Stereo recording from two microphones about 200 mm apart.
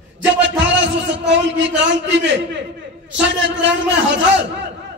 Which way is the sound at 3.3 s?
65° right (ahead or behind).